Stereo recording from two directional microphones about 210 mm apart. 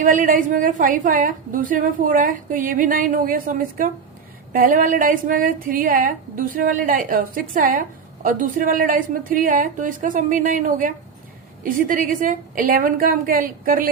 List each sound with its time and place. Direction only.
0.0 s a woman's voice: 40° right (ahead or behind)